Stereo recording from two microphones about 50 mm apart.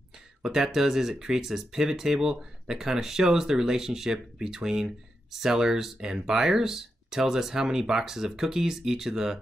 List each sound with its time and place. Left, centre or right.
0.4 s speech: centre